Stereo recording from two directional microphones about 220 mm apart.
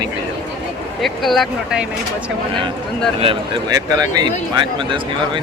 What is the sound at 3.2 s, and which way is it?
Speech, 25° right (ahead or behind).